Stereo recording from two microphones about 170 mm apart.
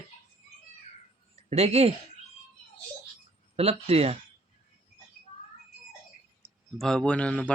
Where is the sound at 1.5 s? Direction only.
40° right (ahead or behind).